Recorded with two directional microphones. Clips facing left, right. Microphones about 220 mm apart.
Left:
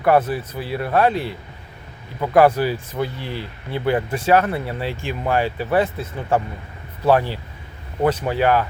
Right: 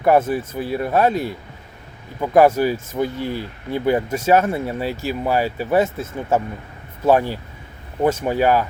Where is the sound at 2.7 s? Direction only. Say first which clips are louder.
Right 2 dB; 45° right (ahead or behind).